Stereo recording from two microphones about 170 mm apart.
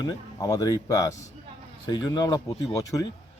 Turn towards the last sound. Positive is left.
turn(degrees=20)  # may be behind; listen again after turning